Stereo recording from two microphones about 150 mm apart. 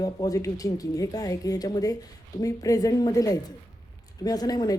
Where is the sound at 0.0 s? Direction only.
25° left (ahead or behind).